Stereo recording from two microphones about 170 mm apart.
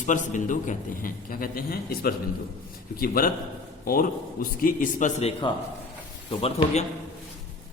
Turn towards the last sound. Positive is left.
turn(degrees=35)  # may be behind; listen again after turning